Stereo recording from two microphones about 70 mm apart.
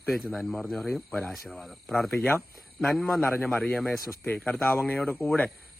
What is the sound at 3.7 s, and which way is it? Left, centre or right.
Speech, centre.